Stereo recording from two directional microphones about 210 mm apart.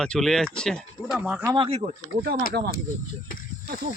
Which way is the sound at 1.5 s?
25° right (ahead or behind).